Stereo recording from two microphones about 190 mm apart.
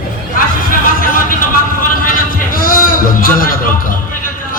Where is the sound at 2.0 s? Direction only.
45° left (ahead or behind).